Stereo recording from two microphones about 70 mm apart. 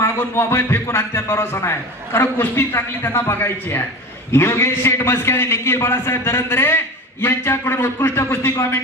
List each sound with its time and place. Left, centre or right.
0.0 s a man's voice: left